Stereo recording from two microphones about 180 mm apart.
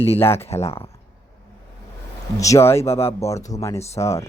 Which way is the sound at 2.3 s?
15° left (ahead or behind).